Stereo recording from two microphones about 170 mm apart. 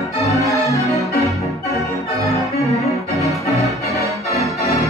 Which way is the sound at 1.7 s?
20° left (ahead or behind).